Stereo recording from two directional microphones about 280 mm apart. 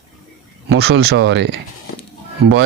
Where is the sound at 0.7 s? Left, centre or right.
Right.